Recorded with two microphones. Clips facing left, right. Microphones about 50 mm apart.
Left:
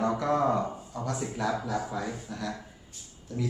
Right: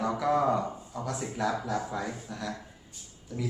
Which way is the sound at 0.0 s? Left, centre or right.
Centre.